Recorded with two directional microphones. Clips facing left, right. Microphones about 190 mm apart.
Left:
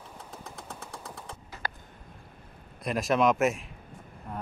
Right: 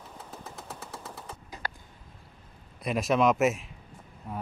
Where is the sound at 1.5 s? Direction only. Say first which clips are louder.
Left 1 dB; 15° right (ahead or behind).